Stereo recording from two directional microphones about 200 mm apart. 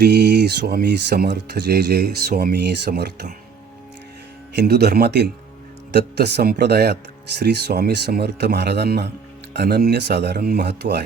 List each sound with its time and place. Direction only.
0.0 s speech: 55° right (ahead or behind)
4.5 s speech: 50° right (ahead or behind)